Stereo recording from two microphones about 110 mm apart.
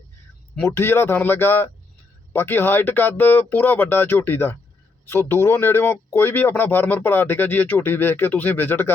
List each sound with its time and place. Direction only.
0.7 s speech: 20° left (ahead or behind)